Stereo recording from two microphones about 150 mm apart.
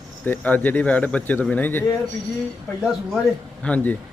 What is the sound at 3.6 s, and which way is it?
Speech, 10° left (ahead or behind).